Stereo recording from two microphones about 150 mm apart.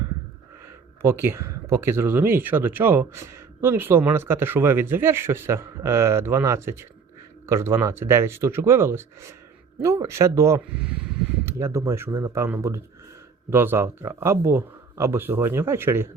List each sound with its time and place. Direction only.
0.6 s speech: 15° right (ahead or behind)
10.6 s speech: 5° right (ahead or behind)
11.4 s speech: 15° right (ahead or behind)